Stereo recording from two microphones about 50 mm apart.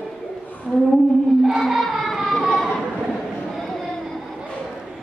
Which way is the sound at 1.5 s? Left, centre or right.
Centre.